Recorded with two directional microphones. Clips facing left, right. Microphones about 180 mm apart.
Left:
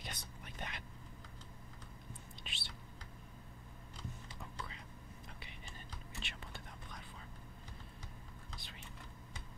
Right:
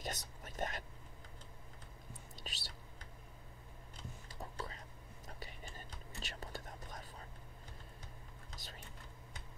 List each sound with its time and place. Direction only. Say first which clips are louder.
0.0 s whispering: right 5 dB; 40° right (ahead or behind)
2.4 s whispering: right 4 dB; 40° right (ahead or behind)
4.3 s whispering: right 3 dB; 40° right (ahead or behind)
8.5 s a sound: right 4 dB; 40° right (ahead or behind)